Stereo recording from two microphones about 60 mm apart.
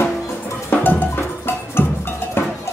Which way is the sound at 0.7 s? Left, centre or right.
Left.